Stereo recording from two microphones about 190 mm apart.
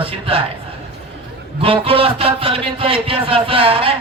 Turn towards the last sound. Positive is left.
turn(degrees=-30)  # may be behind; listen again after turning